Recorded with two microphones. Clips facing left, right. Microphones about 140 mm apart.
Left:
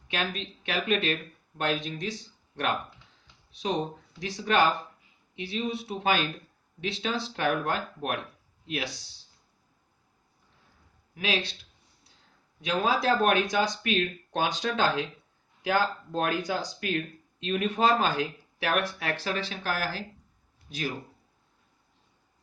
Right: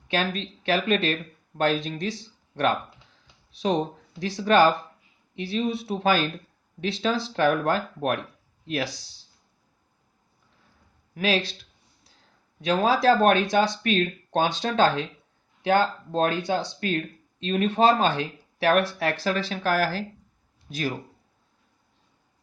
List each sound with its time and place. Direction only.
0.1 s speech: 35° right (ahead or behind)
3.5 s speech: 35° right (ahead or behind)
11.1 s speech: 40° right (ahead or behind)
12.6 s speech: 35° right (ahead or behind)